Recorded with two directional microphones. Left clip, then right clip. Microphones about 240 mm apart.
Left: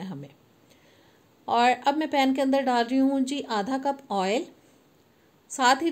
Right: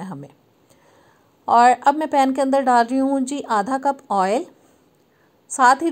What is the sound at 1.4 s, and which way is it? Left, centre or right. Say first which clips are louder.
A woman's voice: right 8 dB; centre.